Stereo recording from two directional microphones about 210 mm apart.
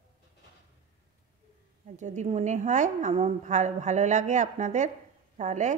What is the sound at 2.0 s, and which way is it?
A woman's voice, 35° right (ahead or behind).